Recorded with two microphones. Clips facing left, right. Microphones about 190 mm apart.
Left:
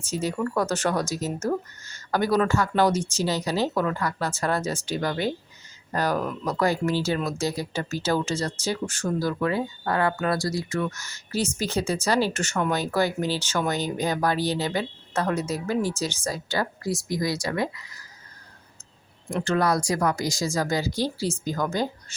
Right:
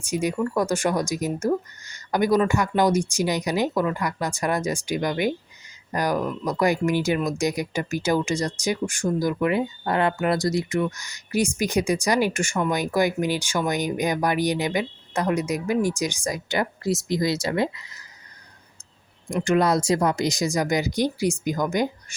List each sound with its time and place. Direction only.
0.0 s speech: 15° right (ahead or behind)
19.3 s speech: 15° right (ahead or behind)